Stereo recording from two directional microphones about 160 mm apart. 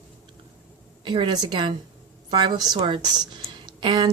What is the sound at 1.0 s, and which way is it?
A woman's voice, 30° right (ahead or behind).